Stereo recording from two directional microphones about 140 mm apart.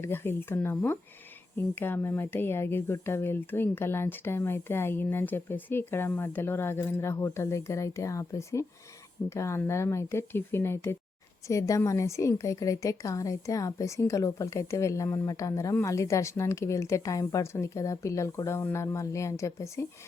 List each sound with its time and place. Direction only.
0.0 s a woman's voice: 15° left (ahead or behind)